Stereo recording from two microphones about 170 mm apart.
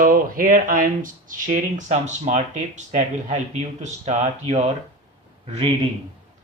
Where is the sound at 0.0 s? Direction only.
55° right (ahead or behind).